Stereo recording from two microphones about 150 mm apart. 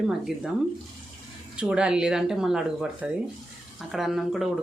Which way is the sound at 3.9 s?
Centre (ahead or behind).